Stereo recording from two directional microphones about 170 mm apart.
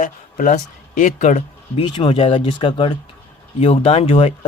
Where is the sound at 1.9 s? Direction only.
35° left (ahead or behind).